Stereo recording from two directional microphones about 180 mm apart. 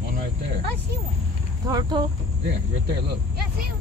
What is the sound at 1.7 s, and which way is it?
Speech, 25° right (ahead or behind).